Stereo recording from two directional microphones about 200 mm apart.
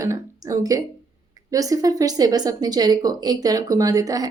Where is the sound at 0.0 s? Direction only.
15° right (ahead or behind).